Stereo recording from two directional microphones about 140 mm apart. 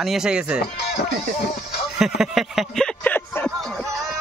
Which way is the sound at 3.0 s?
15° left (ahead or behind).